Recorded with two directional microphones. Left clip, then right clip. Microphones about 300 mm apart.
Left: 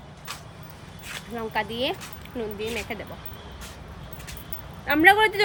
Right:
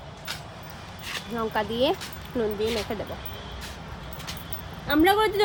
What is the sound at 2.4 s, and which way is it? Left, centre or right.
Speech, centre.